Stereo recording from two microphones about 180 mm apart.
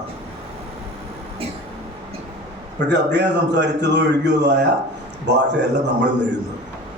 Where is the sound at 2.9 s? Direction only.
75° right (ahead or behind).